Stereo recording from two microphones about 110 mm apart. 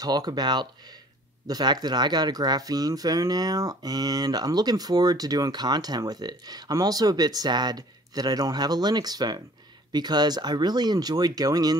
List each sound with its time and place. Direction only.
0.0 s speech: 35° right (ahead or behind)